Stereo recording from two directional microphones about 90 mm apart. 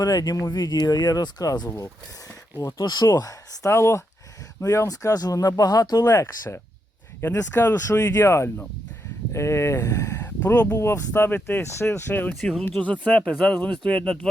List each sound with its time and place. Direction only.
0.0 s speech: 45° left (ahead or behind)
2.7 s speech: 50° left (ahead or behind)
3.1 s speech: 35° left (ahead or behind)
7.3 s speech: 30° left (ahead or behind)
10.2 s speech: 20° left (ahead or behind)
10.8 s speech: 30° left (ahead or behind)
12.3 s speech: 5° left (ahead or behind)